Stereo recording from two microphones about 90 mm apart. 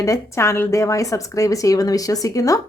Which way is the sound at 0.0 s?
35° left (ahead or behind).